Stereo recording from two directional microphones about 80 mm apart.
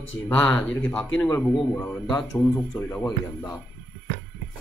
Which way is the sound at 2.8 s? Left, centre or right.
Left.